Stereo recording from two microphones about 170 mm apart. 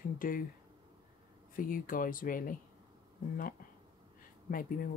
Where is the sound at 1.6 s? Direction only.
55° left (ahead or behind).